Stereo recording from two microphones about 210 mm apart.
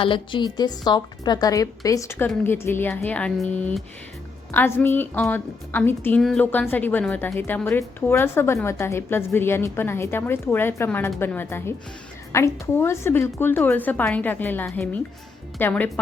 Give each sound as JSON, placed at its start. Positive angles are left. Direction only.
{"t": 0.0, "sound": "a woman's voice", "side_deg": 25}